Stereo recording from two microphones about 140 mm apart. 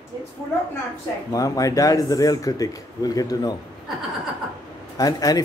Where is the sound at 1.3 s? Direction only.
25° left (ahead or behind).